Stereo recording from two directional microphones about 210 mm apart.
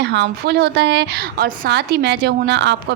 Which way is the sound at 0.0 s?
55° right (ahead or behind).